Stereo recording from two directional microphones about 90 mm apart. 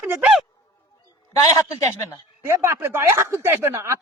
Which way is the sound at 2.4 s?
30° right (ahead or behind).